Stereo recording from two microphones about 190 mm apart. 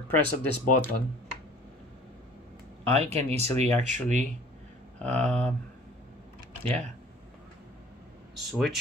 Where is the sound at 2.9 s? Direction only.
35° right (ahead or behind).